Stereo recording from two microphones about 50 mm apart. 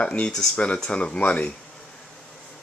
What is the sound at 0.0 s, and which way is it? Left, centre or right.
Speech, left.